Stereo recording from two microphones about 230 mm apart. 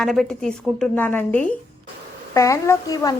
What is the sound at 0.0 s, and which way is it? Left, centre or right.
A woman's voice, centre.